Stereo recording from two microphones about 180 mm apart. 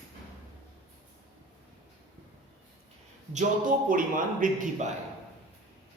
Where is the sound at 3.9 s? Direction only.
50° right (ahead or behind).